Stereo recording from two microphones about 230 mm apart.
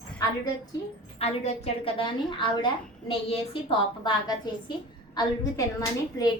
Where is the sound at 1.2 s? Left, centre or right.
Left.